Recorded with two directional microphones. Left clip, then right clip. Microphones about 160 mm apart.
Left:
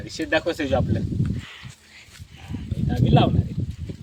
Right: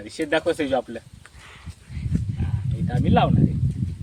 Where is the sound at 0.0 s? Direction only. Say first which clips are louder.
Even; 10° right (ahead or behind).